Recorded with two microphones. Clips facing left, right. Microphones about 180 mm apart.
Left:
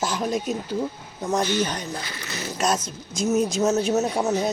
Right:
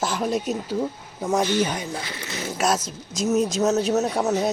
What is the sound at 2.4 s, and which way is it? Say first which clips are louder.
Speech: right 1 dB; 5° right (ahead or behind).